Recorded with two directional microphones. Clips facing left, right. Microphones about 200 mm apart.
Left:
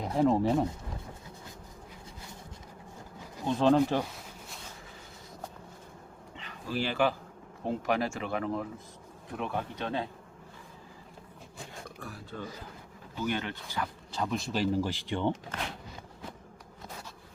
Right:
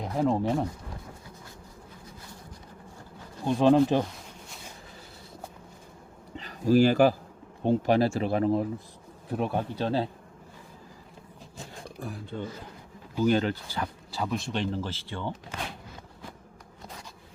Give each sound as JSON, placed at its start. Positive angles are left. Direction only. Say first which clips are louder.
{"t": 0.0, "sound": "speech", "louder": "left 1 dB", "side_deg": 0}
{"t": 3.4, "sound": "speech", "louder": "right 4 dB", "side_deg": -15}
{"t": 6.3, "sound": "speech", "louder": "right 13 dB", "side_deg": -40}
{"t": 7.6, "sound": "speech", "louder": "right 7 dB", "side_deg": -30}
{"t": 12.0, "sound": "speech", "louder": "right 6 dB", "side_deg": -25}
{"t": 13.2, "sound": "speech", "louder": "right 9 dB", "side_deg": -35}
{"t": 14.1, "sound": "speech", "louder": "right 1 dB", "side_deg": -5}